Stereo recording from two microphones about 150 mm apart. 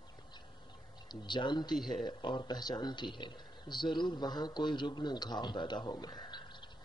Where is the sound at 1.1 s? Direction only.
30° left (ahead or behind).